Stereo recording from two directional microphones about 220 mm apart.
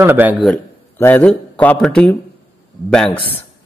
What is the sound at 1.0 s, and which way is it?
Speech, 10° left (ahead or behind).